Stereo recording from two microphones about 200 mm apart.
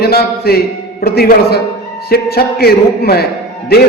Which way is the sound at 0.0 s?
50° left (ahead or behind).